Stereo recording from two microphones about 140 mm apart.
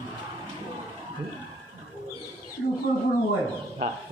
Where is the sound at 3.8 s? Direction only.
35° right (ahead or behind).